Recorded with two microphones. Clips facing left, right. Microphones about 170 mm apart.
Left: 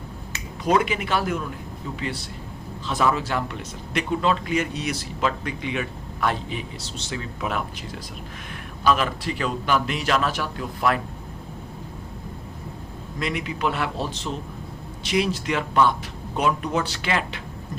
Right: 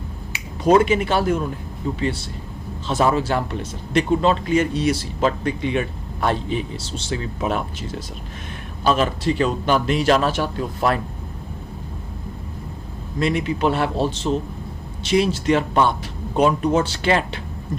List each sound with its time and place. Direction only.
0.6 s a man's voice: 30° right (ahead or behind)
13.1 s a man's voice: 30° right (ahead or behind)